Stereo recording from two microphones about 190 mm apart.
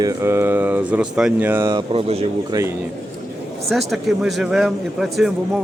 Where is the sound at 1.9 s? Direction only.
30° right (ahead or behind).